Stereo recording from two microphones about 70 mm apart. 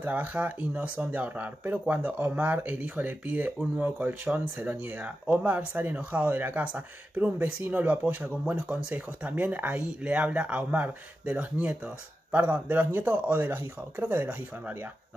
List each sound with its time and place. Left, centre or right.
0.0 s speech: right